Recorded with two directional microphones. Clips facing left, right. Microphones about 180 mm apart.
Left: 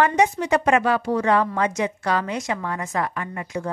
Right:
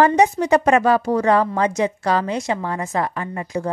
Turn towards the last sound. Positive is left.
turn(degrees=-30)  # may be behind; listen again after turning